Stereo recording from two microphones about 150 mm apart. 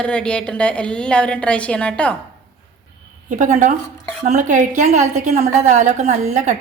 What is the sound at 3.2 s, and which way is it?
A woman's voice, 55° right (ahead or behind).